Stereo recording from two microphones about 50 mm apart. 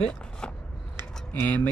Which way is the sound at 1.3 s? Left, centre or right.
Left.